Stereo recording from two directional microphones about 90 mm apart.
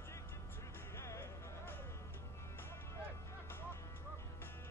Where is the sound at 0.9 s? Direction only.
30° left (ahead or behind).